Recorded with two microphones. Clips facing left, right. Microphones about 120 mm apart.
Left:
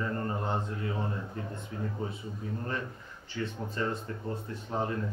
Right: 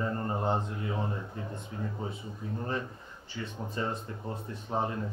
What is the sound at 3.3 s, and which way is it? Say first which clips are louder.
Speech: left 2 dB; 15° right (ahead or behind).